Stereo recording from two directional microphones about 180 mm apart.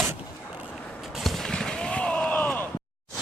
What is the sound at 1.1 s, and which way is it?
Gunshot, centre (ahead or behind).